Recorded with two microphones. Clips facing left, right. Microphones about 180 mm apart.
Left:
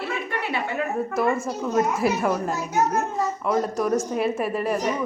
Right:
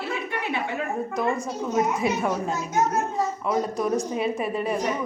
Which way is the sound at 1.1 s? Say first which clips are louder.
Left 3 dB; 5° left (ahead or behind).